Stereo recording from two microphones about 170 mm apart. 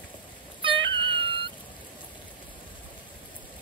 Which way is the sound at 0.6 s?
30° right (ahead or behind).